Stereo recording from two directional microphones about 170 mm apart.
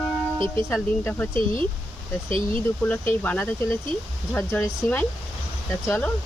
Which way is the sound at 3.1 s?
10° left (ahead or behind).